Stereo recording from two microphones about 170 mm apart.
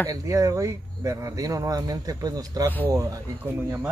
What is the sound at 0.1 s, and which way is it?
A man's voice, 20° right (ahead or behind).